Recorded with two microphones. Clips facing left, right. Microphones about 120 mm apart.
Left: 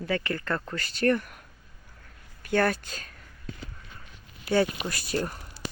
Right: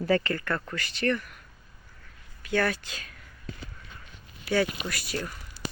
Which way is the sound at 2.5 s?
45° left (ahead or behind).